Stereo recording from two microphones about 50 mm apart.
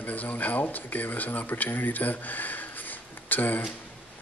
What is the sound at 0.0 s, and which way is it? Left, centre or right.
Speech, left.